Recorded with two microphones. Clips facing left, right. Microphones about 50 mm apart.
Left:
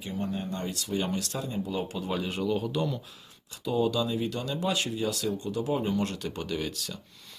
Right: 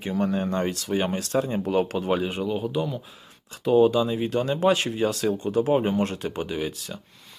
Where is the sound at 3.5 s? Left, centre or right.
Right.